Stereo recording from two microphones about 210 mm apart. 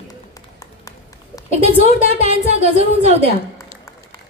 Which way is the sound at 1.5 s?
30° right (ahead or behind).